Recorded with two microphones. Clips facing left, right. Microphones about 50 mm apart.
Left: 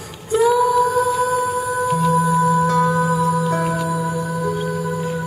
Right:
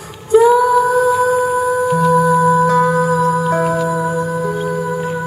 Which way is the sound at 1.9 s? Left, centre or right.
Centre.